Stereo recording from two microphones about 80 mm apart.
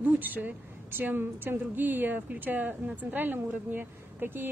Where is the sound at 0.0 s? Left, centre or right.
Right.